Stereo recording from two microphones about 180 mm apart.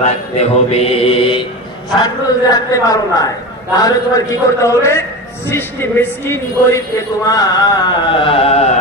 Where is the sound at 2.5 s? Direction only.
20° left (ahead or behind).